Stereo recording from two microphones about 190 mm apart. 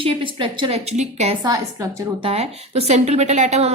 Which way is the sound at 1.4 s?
20° right (ahead or behind).